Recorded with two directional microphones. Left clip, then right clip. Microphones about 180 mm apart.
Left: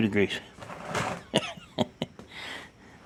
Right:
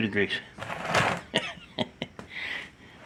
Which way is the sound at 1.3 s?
60° left (ahead or behind).